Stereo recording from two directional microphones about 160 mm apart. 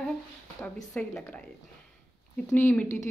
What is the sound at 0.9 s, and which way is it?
Speech, 10° left (ahead or behind).